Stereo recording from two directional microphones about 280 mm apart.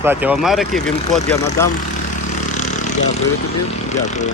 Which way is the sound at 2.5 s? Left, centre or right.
Left.